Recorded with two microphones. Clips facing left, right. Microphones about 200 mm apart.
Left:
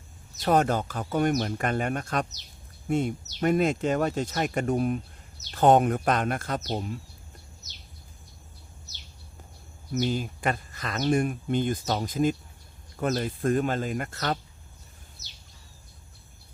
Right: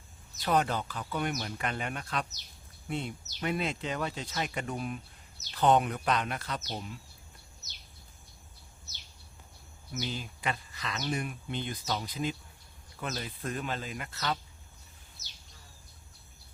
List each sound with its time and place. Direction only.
0.4 s speech: 45° left (ahead or behind)
10.0 s speech: 50° left (ahead or behind)